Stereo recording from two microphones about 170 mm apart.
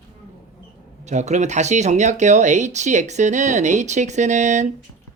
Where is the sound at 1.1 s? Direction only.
45° right (ahead or behind).